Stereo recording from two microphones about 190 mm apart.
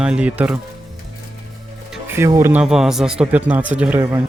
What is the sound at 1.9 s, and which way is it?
Speech, 10° right (ahead or behind).